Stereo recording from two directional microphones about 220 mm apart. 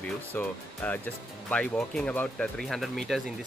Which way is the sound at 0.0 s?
5° left (ahead or behind).